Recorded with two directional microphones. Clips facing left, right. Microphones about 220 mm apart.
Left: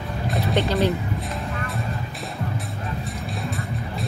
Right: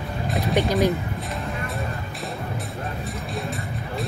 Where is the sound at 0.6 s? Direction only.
15° right (ahead or behind).